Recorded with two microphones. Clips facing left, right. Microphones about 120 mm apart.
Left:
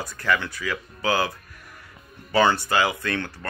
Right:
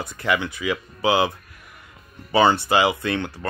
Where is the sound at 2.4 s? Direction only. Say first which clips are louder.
Right 3 dB; centre (ahead or behind).